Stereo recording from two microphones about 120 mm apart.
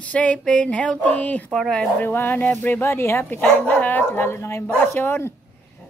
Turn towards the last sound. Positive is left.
turn(degrees=20)  # may be behind; listen again after turning